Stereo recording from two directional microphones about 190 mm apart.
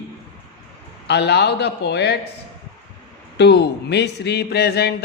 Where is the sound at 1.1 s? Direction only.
65° left (ahead or behind).